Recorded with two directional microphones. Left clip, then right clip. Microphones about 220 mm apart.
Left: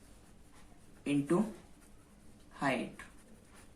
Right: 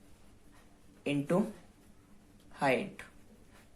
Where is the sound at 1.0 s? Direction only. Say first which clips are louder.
Even; 35° right (ahead or behind).